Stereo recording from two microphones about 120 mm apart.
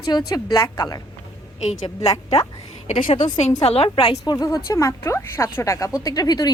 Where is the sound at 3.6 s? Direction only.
55° left (ahead or behind).